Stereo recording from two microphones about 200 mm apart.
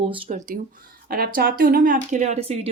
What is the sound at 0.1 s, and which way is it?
Speech, 35° right (ahead or behind).